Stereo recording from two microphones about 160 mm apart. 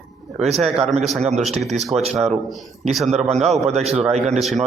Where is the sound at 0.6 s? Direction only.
40° right (ahead or behind).